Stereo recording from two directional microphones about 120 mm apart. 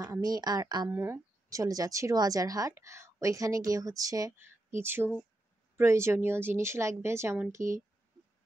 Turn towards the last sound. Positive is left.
turn(degrees=-25)  # may be behind; listen again after turning